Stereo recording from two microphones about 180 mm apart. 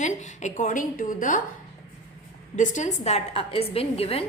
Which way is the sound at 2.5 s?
40° left (ahead or behind).